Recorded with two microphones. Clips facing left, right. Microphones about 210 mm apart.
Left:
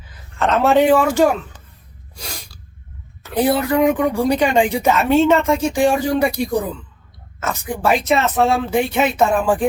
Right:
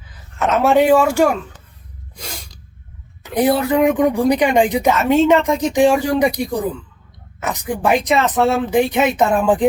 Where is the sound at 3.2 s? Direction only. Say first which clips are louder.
Right 1 dB; 15° right (ahead or behind).